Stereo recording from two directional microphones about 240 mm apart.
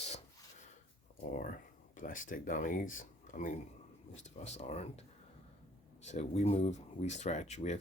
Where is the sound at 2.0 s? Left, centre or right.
Left.